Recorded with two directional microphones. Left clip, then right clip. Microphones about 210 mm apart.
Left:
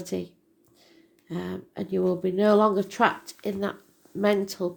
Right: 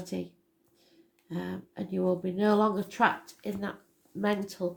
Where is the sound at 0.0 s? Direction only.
40° left (ahead or behind).